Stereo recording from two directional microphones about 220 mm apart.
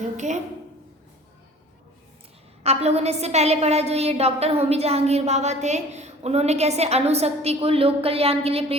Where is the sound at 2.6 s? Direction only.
30° right (ahead or behind).